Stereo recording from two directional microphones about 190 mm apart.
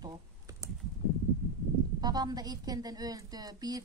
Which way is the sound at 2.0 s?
20° right (ahead or behind).